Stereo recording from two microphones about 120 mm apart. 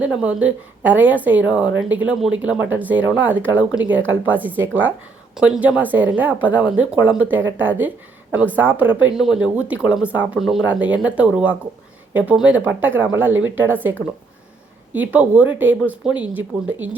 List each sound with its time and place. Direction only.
0.0 s a woman's voice: 10° right (ahead or behind)
14.9 s a woman's voice: 15° right (ahead or behind)